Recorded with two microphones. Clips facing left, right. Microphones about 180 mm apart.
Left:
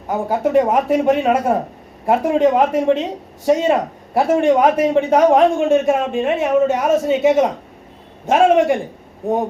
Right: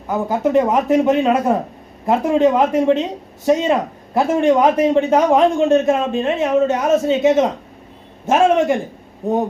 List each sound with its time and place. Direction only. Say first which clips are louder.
0.1 s a man's voice: even; 10° left (ahead or behind)